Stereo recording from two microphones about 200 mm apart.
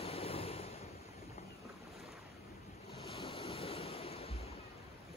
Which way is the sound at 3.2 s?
30° left (ahead or behind).